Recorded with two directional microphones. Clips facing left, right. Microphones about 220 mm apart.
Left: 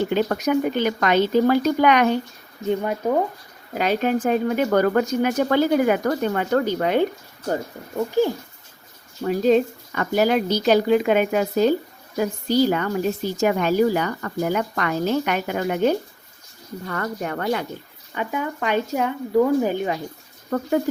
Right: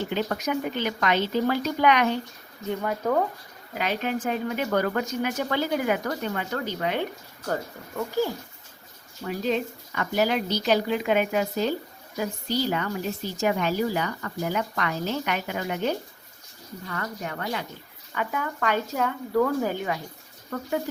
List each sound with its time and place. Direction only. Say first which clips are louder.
0.1 s speech: left 7 dB; 50° left (ahead or behind)
2.6 s speech: left 4 dB; 20° left (ahead or behind)
3.8 s speech: left 7 dB; 40° left (ahead or behind)
7.4 s speech: left 4 dB; 25° left (ahead or behind)
9.2 s speech: left 9 dB; 45° left (ahead or behind)
18.1 s speech: left 4 dB; 20° left (ahead or behind)
20.5 s speech: left 7 dB; 50° left (ahead or behind)